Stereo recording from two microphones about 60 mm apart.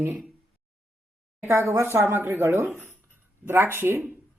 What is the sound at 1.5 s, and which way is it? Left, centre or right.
A woman's voice, right.